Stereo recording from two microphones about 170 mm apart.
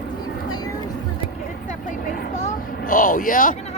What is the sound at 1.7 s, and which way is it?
Vehicle, 45° left (ahead or behind).